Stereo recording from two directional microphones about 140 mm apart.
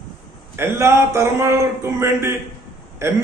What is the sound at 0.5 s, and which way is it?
A man's voice, 20° right (ahead or behind).